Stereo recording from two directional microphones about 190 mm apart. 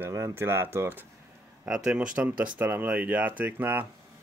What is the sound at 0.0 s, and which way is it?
Speech, 15° right (ahead or behind).